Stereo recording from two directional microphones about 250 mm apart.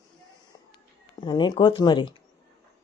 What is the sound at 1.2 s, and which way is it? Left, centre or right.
Speech, centre.